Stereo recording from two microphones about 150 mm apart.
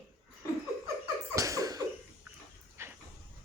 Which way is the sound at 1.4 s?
20° right (ahead or behind).